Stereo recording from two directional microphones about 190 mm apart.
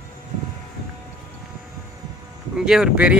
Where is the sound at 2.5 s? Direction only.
5° right (ahead or behind).